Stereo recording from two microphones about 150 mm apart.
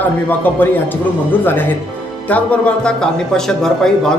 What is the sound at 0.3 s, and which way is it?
Speech, 10° left (ahead or behind).